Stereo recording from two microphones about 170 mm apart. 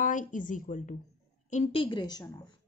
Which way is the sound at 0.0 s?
50° left (ahead or behind).